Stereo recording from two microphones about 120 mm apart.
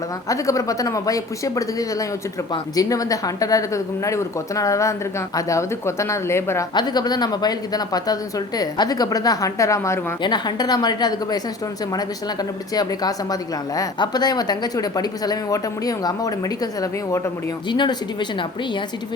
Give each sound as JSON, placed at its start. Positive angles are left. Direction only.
{"t": 0.3, "sound": "speech", "side_deg": 30}
{"t": 6.7, "sound": "speech", "side_deg": 35}
{"t": 10.2, "sound": "speech", "side_deg": 35}
{"t": 12.7, "sound": "speech", "side_deg": 35}
{"t": 17.7, "sound": "speech", "side_deg": 40}